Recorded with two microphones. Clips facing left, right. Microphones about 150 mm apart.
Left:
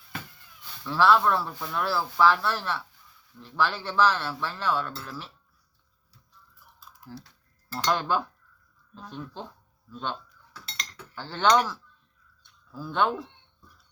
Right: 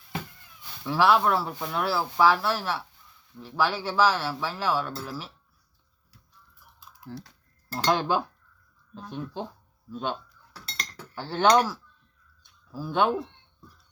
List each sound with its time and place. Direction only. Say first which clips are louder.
0.9 s speech: even; 15° right (ahead or behind)
7.9 s speech: right 2 dB; 15° right (ahead or behind)
10.5 s chink: right 2 dB; 35° right (ahead or behind)
11.1 s speech: right 2 dB; 15° right (ahead or behind)
12.7 s speech: right 2 dB; 15° right (ahead or behind)